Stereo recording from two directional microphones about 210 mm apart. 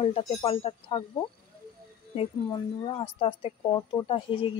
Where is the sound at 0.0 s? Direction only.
30° left (ahead or behind).